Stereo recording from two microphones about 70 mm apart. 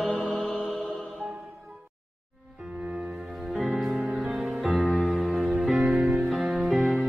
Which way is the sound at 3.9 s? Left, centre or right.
Centre.